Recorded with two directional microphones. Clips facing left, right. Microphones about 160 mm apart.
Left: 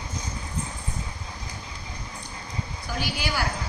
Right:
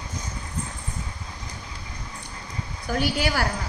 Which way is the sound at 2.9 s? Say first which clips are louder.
Right 7 dB; 50° right (ahead or behind).